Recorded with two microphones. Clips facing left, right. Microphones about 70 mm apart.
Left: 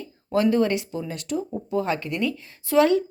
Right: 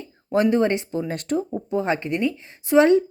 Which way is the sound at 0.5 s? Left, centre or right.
Right.